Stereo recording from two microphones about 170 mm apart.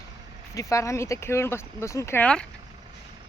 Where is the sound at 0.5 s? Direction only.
20° left (ahead or behind).